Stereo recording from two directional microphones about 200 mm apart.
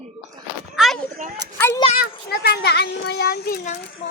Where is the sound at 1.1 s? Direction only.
45° right (ahead or behind).